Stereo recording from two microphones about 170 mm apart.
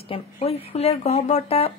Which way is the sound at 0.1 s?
35° left (ahead or behind).